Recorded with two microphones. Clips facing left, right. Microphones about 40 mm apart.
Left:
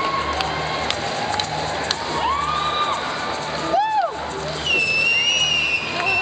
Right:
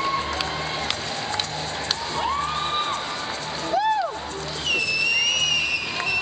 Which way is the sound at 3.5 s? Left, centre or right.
Centre.